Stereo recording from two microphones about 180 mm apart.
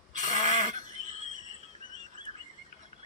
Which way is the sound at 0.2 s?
40° right (ahead or behind).